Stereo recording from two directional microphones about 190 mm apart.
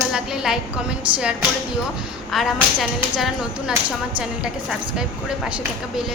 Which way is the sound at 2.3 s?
Centre (ahead or behind).